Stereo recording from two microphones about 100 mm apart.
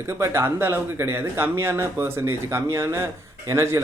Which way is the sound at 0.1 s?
25° right (ahead or behind).